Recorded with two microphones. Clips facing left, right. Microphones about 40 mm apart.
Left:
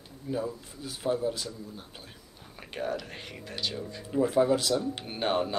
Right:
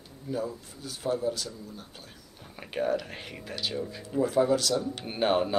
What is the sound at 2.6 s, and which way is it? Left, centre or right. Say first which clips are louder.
Speech: right 5 dB; centre.